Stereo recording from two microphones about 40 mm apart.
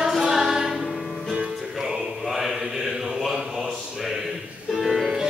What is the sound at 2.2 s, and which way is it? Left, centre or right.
Mantra, centre.